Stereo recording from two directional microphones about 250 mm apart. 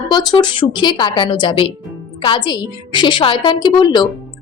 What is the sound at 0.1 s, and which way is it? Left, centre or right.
A woman's voice, centre.